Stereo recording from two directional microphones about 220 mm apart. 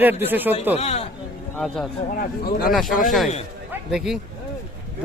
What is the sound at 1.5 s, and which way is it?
Speech, centre (ahead or behind).